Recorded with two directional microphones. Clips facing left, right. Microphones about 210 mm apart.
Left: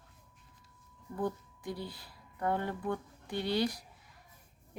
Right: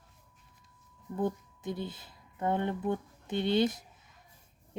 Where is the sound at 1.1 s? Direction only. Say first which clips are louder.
Right 3 dB; 20° right (ahead or behind).